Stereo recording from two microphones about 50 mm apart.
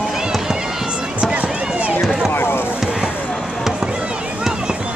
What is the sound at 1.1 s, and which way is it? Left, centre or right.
Run, right.